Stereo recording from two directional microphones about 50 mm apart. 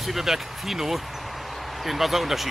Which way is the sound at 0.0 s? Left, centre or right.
Centre.